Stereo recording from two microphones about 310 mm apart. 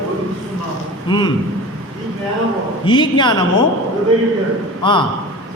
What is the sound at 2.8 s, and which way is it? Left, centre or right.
Speech, centre.